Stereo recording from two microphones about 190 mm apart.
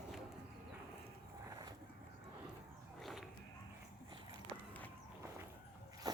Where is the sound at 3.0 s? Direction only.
Centre (ahead or behind).